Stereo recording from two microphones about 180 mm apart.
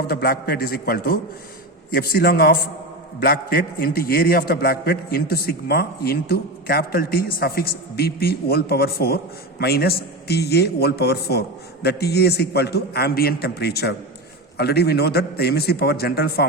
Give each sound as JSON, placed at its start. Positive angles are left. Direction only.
{"t": 0.1, "sound": "a man's voice", "side_deg": 60}